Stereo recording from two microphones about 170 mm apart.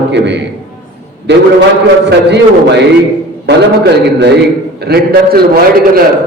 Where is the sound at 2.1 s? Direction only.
90° right; by 5.5 s 65° right (ahead or behind).